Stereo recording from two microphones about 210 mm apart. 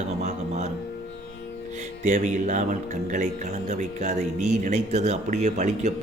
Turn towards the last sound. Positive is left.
turn(degrees=-35)  # may be behind; listen again after turning